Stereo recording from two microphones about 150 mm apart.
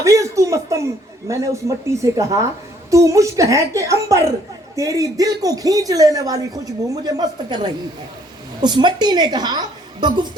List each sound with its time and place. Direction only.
0.0 s speech: 20° right (ahead or behind)